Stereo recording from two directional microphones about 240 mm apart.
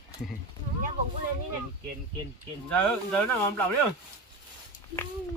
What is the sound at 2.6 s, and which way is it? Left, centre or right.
Speech, centre.